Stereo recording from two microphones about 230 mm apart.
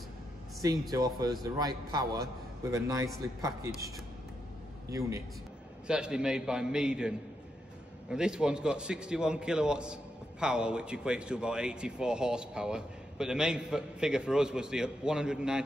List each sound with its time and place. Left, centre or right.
0.6 s a man's voice: centre
5.9 s speech: centre